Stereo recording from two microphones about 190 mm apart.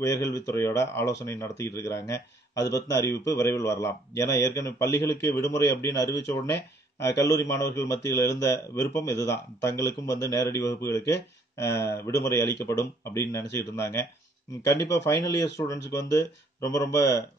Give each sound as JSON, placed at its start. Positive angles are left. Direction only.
{"t": 0.0, "sound": "speech", "side_deg": 15}